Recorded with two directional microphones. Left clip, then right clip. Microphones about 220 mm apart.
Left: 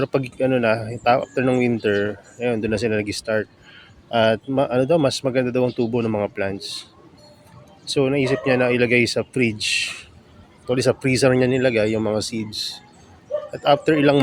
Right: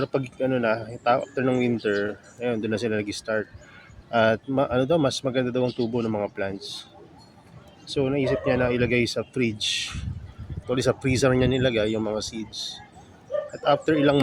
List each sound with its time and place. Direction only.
0.0 s speech: 20° left (ahead or behind)
7.9 s speech: 25° left (ahead or behind)